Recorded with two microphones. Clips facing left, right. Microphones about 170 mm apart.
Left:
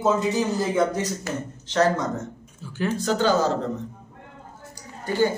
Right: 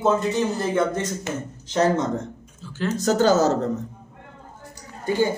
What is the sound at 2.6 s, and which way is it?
Speech, 15° left (ahead or behind).